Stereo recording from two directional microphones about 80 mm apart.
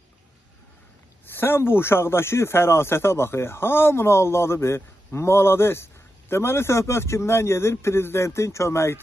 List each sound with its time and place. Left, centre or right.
1.2 s speech: left